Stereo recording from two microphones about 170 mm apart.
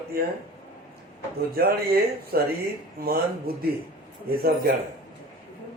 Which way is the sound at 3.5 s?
65° right (ahead or behind).